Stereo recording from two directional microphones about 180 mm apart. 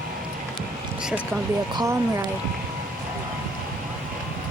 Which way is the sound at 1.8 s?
15° right (ahead or behind).